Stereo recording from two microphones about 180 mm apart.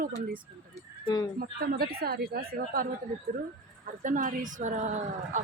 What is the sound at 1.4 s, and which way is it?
A woman's voice, 60° right (ahead or behind).